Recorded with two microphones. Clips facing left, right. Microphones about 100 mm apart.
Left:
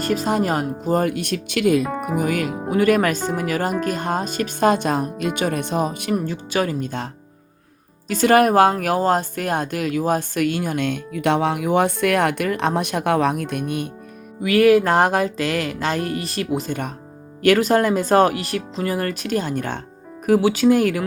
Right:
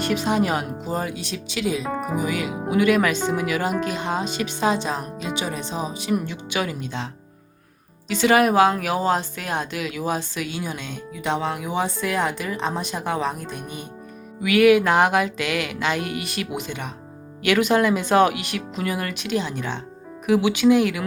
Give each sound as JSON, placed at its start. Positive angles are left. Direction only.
{"t": 0.0, "sound": "speech", "side_deg": 40}
{"t": 1.8, "sound": "speech", "side_deg": 5}
{"t": 2.1, "sound": "speech", "side_deg": 50}
{"t": 6.1, "sound": "speech", "side_deg": 40}
{"t": 14.4, "sound": "speech", "side_deg": 35}